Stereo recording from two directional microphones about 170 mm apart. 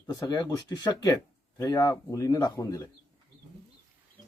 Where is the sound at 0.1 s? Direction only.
25° left (ahead or behind).